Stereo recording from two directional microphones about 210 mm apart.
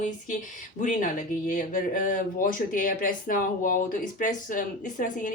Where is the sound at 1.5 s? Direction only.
40° left (ahead or behind).